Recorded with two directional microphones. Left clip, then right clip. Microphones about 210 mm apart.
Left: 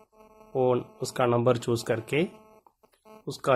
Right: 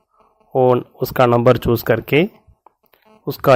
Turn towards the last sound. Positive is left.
turn(degrees=-35)  # may be behind; listen again after turning